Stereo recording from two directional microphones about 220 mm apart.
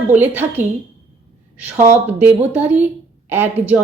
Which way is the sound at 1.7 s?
30° right (ahead or behind).